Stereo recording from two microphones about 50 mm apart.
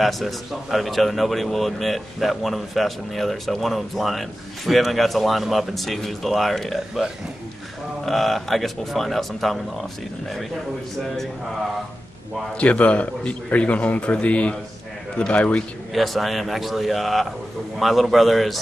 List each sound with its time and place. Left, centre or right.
0.0 s a man's voice: centre
8.0 s a man's voice: centre
12.5 s a man's voice: left
15.9 s a man's voice: centre